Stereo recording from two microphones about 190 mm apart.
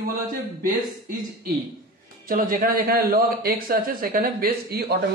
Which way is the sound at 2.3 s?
50° right (ahead or behind).